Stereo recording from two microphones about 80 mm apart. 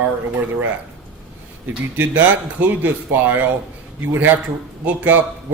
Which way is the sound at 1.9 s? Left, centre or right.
Right.